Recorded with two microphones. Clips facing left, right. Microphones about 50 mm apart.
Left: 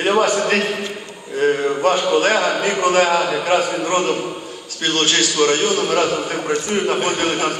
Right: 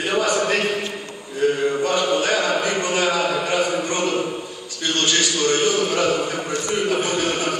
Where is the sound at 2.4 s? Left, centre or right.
Left.